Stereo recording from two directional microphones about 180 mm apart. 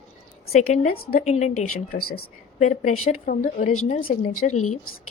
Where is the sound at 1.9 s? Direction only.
55° left (ahead or behind).